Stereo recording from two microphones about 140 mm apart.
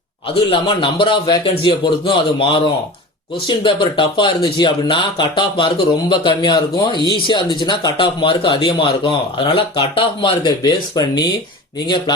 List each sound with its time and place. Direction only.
0.5 s speech: 40° left (ahead or behind)